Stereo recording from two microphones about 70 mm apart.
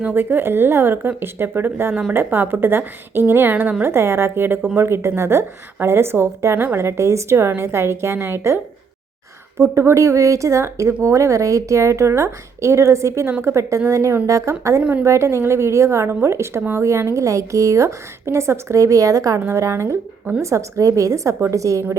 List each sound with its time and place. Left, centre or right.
0.1 s a woman's voice: right